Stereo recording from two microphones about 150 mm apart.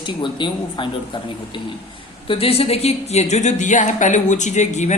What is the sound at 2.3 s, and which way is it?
Speech, 40° left (ahead or behind).